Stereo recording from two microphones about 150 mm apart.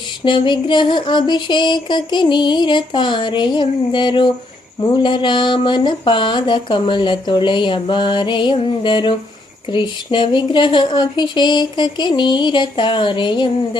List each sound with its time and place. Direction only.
0.3 s speech: 30° left (ahead or behind)